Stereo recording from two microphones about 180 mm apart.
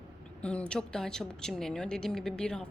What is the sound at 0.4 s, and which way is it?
A woman's voice, 5° left (ahead or behind).